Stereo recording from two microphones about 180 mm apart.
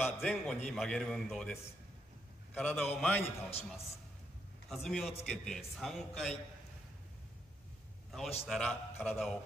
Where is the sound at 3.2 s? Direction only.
35° left (ahead or behind).